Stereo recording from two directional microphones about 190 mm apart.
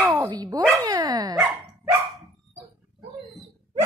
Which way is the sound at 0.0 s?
15° right (ahead or behind).